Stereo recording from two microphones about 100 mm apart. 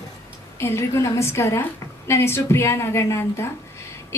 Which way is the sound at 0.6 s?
25° left (ahead or behind).